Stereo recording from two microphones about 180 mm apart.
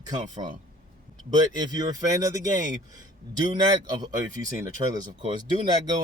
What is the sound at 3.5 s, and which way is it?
Speech, 25° right (ahead or behind).